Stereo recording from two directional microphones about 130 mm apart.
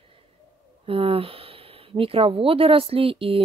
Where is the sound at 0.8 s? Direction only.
45° right (ahead or behind).